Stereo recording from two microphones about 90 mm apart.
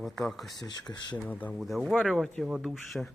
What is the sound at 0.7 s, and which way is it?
Speech, 50° left (ahead or behind).